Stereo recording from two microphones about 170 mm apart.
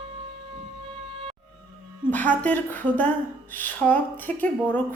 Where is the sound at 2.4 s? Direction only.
10° left (ahead or behind).